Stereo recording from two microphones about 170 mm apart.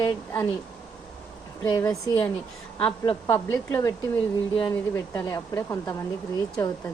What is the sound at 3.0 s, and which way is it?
Speech, 30° left (ahead or behind).